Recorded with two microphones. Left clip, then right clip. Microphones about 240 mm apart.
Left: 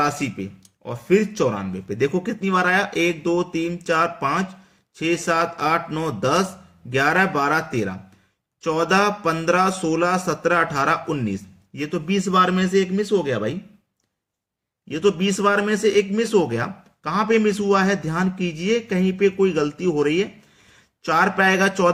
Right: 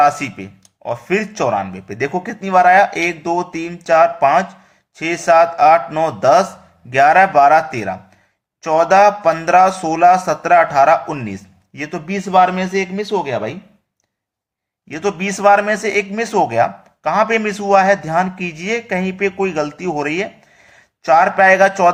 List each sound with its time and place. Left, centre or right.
0.0 s a man's voice: centre
14.9 s a man's voice: centre